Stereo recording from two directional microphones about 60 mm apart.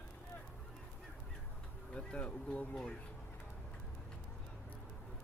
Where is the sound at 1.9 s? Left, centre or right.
Centre.